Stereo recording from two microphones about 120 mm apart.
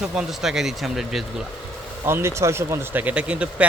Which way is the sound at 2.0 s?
20° right (ahead or behind).